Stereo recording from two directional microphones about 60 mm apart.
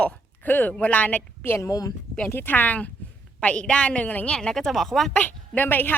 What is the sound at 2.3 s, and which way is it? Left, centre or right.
Speech, left.